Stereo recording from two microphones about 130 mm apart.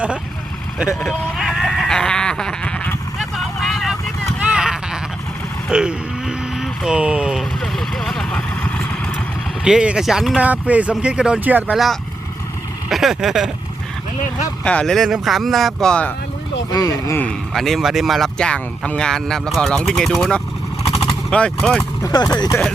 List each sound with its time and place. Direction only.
0.9 s sheep: centre (ahead or behind)
3.2 s a sound: centre (ahead or behind)
5.6 s vehicle: 5° right (ahead or behind)
9.6 s speech: 5° right (ahead or behind)
12.9 s speech: centre (ahead or behind)
14.6 s speech: 10° left (ahead or behind)
16.7 s speech: 25° left (ahead or behind)
17.2 s speech: 5° left (ahead or behind)
20.9 s vehicle: 5° left (ahead or behind)
22.0 s speech: 30° left (ahead or behind)